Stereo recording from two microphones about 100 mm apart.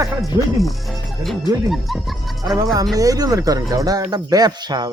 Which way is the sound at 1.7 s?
Centre (ahead or behind).